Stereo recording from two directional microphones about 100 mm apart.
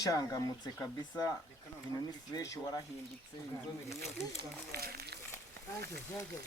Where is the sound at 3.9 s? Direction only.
90° left.